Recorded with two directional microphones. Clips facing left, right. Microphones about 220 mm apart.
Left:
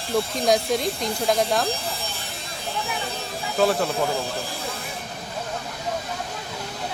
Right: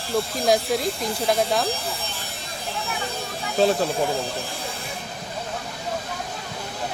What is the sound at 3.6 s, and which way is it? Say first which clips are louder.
Speech: right 1 dB; 25° right (ahead or behind).